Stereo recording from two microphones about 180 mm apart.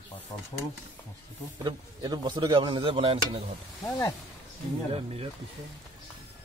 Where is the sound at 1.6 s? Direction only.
25° right (ahead or behind).